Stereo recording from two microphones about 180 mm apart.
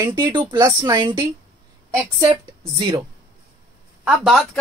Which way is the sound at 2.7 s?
25° right (ahead or behind).